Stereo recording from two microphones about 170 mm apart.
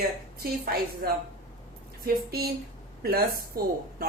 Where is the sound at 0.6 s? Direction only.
60° right (ahead or behind).